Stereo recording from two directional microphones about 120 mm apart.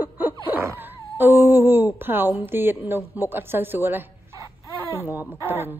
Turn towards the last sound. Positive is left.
turn(degrees=-20)  # may be behind; listen again after turning